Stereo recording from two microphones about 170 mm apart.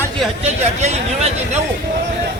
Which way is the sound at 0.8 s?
40° right (ahead or behind).